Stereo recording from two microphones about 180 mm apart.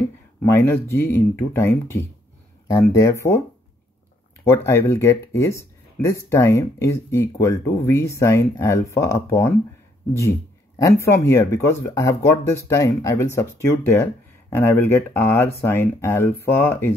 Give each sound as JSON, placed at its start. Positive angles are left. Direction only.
{"t": 0.4, "sound": "speech", "side_deg": 10}
{"t": 4.5, "sound": "speech", "side_deg": 15}
{"t": 10.8, "sound": "speech", "side_deg": 15}